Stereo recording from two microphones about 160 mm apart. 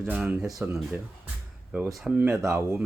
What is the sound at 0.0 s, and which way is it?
Speech, 10° right (ahead or behind).